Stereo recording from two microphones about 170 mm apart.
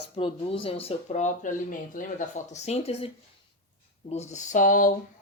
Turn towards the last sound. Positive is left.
turn(degrees=50)  # may be behind; listen again after turning